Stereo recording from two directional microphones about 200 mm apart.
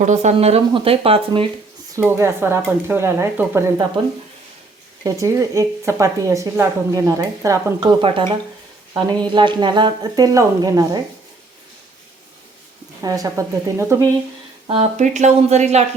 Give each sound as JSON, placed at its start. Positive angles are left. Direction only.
{"t": 0.0, "sound": "speech", "side_deg": -35}
{"t": 2.0, "sound": "a woman's voice", "side_deg": -10}
{"t": 5.0, "sound": "a woman's voice", "side_deg": -15}
{"t": 13.0, "sound": "a woman's voice", "side_deg": -15}
{"t": 14.7, "sound": "speech", "side_deg": -35}